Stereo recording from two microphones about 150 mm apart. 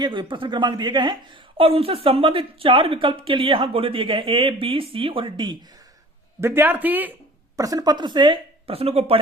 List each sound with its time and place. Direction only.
0.0 s speech: 30° right (ahead or behind)
6.4 s a man's voice: 15° right (ahead or behind)
7.5 s speech: 25° right (ahead or behind); by 9.2 s 40° right (ahead or behind)